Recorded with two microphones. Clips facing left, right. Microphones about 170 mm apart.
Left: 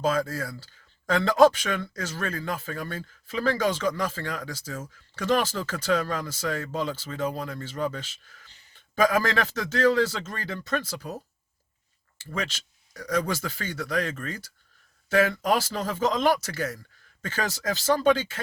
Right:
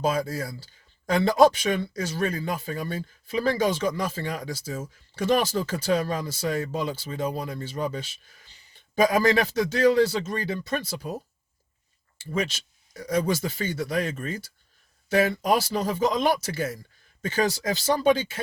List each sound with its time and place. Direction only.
0.0 s speech: 15° right (ahead or behind)